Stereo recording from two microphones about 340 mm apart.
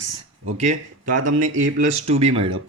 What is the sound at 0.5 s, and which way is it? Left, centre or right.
A man's voice, centre.